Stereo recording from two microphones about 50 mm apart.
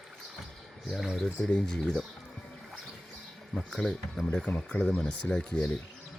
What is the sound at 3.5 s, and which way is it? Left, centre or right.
Speech, centre.